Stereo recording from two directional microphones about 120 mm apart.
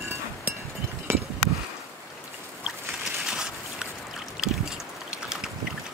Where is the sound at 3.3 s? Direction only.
5° right (ahead or behind).